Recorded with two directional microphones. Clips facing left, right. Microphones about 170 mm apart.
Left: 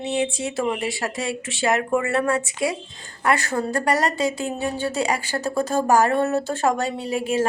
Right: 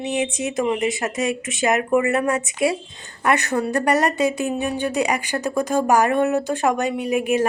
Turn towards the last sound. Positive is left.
turn(degrees=-15)  # may be behind; listen again after turning